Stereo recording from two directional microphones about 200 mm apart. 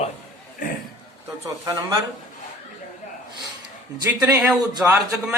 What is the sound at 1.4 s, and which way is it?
Speech, 15° right (ahead or behind).